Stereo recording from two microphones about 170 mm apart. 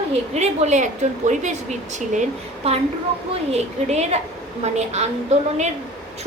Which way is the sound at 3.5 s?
40° right (ahead or behind).